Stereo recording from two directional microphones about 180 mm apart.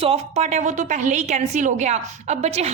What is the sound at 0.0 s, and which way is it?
A woman's voice, 35° right (ahead or behind).